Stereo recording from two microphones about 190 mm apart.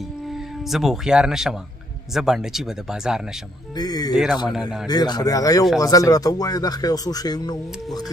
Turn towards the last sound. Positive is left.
turn(degrees=20)  # may be behind; listen again after turning